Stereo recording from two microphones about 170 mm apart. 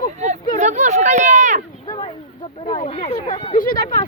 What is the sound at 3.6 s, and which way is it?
Speech, 55° left (ahead or behind).